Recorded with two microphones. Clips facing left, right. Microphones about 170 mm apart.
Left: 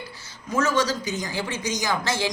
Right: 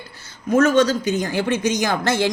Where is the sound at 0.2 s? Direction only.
55° right (ahead or behind).